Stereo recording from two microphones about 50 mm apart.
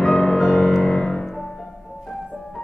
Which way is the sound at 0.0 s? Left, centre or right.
Centre.